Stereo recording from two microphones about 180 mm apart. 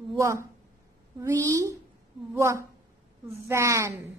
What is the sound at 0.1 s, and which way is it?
A woman's voice, 15° right (ahead or behind).